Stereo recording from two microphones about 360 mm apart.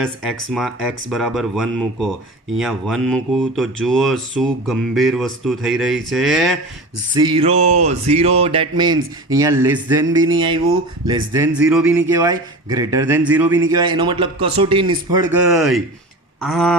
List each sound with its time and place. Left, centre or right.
0.0 s speech: centre
7.1 s speech: centre